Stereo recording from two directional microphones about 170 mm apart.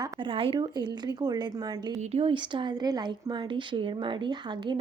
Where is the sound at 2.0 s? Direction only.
35° right (ahead or behind).